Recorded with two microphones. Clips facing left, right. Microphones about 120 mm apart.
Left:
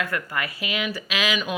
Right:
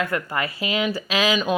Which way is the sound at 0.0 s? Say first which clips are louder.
Right 3 dB; 25° right (ahead or behind).